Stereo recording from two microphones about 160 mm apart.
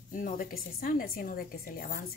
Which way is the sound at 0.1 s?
60° left (ahead or behind).